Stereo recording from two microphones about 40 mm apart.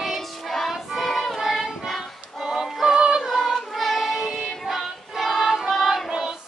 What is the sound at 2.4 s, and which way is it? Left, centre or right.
Music, centre.